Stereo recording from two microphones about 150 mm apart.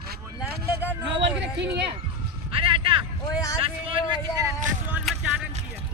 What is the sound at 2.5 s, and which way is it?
Music, 35° right (ahead or behind).